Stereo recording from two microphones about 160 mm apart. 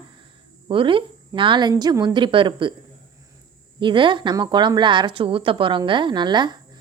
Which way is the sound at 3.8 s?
30° right (ahead or behind).